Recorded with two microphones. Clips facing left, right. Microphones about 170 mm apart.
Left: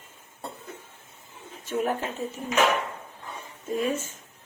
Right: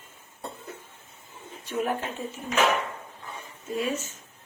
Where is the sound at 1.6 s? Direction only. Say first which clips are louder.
Left 1 dB; 45° left (ahead or behind).